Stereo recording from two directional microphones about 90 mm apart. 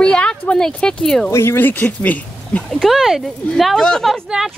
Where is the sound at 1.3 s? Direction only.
30° left (ahead or behind).